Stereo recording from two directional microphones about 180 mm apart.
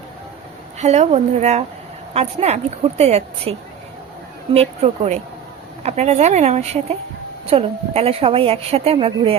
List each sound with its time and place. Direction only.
0.8 s a woman's voice: 40° right (ahead or behind)
4.8 s a woman's voice: 40° right (ahead or behind)